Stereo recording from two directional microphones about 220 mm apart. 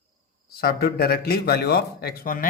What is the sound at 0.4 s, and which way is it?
Speech, 45° left (ahead or behind).